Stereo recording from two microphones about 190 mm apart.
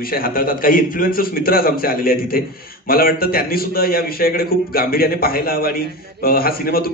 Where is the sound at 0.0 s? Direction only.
50° left (ahead or behind).